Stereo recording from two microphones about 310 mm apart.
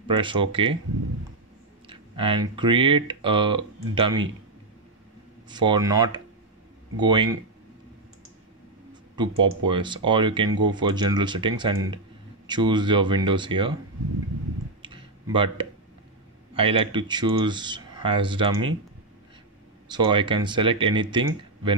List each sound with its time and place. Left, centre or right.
0.1 s speech: centre
1.9 s speech: centre
5.5 s speech: centre
9.4 s speech: centre
14.8 s a sound: centre
16.5 s speech: centre
19.9 s speech: centre